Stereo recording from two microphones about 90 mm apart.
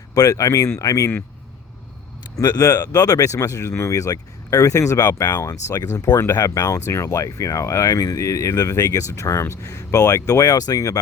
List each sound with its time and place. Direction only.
0.1 s speech: 40° left (ahead or behind)
2.3 s speech: 40° left (ahead or behind)